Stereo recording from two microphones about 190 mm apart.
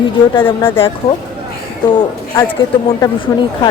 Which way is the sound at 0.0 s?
25° left (ahead or behind).